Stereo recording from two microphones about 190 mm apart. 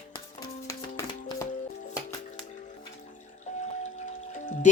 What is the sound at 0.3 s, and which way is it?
Music, 15° left (ahead or behind).